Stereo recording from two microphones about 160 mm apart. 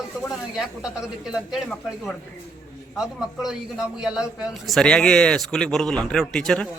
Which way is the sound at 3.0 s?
Centre (ahead or behind).